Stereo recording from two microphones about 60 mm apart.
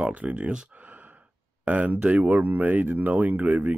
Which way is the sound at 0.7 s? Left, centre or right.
Right.